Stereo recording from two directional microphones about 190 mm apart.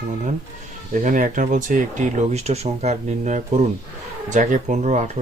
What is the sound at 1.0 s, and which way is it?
Speech, 45° right (ahead or behind).